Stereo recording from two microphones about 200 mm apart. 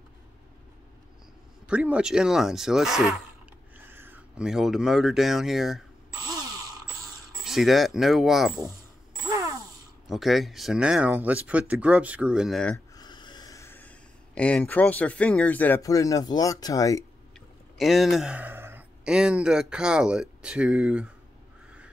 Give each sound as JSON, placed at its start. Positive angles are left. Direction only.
{"t": 1.7, "sound": "speech", "side_deg": -5}
{"t": 7.4, "sound": "speech", "side_deg": 0}
{"t": 9.2, "sound": "a sound", "side_deg": -15}
{"t": 10.0, "sound": "speech", "side_deg": 0}
{"t": 12.7, "sound": "speech", "side_deg": 20}
{"t": 17.7, "sound": "speech", "side_deg": 0}